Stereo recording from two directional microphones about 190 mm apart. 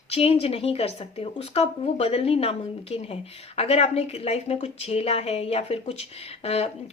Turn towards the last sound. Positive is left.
turn(degrees=30)  # may be behind; listen again after turning